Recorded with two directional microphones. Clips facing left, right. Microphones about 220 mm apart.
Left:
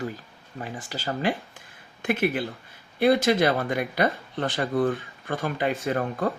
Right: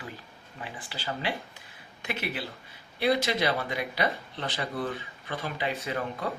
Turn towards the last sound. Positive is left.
turn(degrees=50)  # may be behind; listen again after turning